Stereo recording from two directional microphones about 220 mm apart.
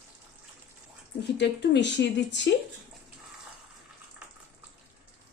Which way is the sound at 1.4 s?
50° left (ahead or behind).